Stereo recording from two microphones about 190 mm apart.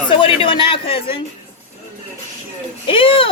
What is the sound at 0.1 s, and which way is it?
Speech, 25° left (ahead or behind).